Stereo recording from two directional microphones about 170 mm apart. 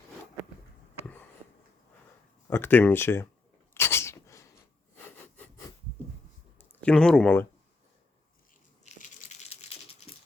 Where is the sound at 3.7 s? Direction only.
15° left (ahead or behind).